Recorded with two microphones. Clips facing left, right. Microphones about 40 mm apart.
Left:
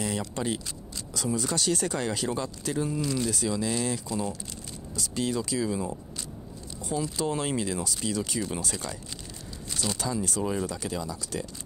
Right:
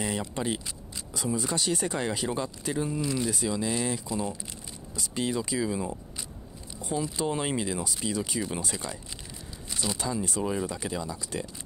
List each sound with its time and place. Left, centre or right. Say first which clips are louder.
0.0 s speech: even; right
9.9 s speech: even; centre
10.7 s speech: even; centre